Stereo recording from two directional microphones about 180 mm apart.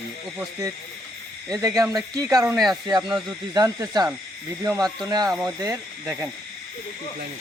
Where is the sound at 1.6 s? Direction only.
20° right (ahead or behind).